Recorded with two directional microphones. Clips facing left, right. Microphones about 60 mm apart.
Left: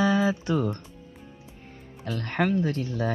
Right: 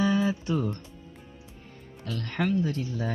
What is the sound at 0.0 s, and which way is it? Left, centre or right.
Music, left.